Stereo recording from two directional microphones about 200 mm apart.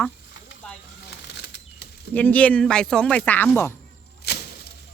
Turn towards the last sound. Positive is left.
turn(degrees=50)  # may be behind; listen again after turning